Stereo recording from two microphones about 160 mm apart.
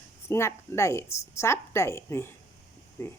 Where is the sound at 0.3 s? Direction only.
15° left (ahead or behind).